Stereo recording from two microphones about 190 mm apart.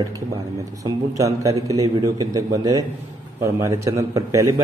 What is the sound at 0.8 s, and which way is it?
A man's voice, 15° right (ahead or behind).